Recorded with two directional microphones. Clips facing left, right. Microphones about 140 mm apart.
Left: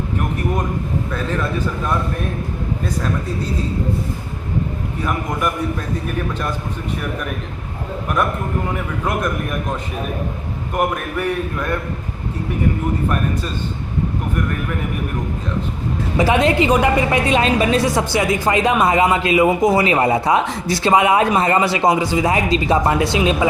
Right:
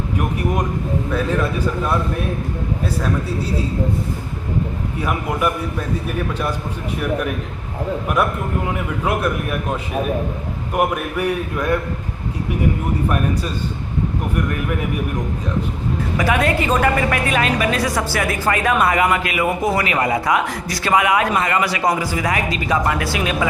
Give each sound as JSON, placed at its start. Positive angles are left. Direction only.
{"t": 1.1, "sound": "a man's voice", "side_deg": -10}
{"t": 4.9, "sound": "a man's voice", "side_deg": -10}
{"t": 8.2, "sound": "a man's voice", "side_deg": -10}
{"t": 10.8, "sound": "a man's voice", "side_deg": -10}
{"t": 16.1, "sound": "a woman's voice", "side_deg": 25}